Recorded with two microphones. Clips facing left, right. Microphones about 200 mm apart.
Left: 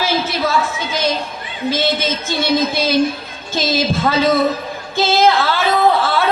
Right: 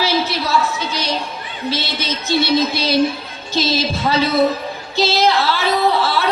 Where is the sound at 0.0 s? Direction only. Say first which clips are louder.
Left 1 dB; 50° left (ahead or behind).